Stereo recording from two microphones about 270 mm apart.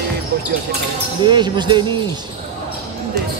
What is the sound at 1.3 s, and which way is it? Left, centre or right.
Speech, centre.